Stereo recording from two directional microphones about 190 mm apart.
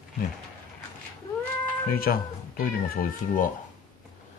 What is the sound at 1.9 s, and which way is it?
Speech, 50° left (ahead or behind).